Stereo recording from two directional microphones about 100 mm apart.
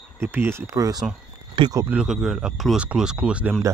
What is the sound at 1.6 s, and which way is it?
Speech, 60° right (ahead or behind).